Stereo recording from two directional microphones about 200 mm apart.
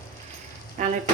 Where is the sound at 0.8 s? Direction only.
40° right (ahead or behind).